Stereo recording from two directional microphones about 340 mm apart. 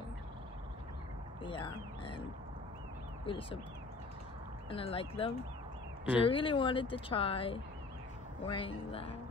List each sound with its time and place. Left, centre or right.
1.4 s speech: centre
3.3 s speech: centre
4.6 s speech: centre